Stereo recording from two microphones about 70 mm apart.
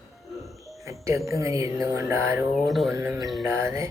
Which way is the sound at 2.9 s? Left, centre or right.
Right.